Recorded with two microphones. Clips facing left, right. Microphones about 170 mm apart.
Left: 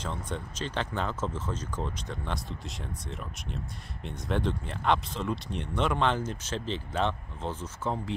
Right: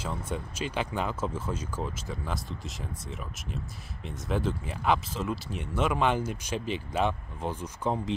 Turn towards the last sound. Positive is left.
turn(degrees=-15)  # may be behind; listen again after turning